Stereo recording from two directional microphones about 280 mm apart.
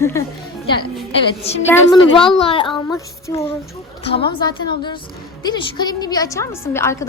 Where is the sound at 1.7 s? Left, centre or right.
Centre.